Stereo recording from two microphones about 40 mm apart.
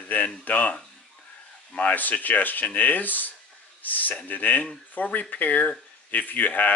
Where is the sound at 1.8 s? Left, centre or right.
Left.